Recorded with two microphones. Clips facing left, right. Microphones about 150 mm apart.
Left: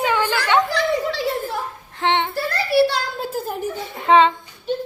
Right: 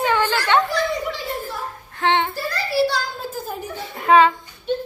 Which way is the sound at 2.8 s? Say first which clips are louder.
Left 2 dB; 65° left (ahead or behind).